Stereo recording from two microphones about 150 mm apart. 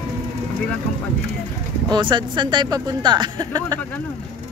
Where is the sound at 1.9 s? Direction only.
30° right (ahead or behind).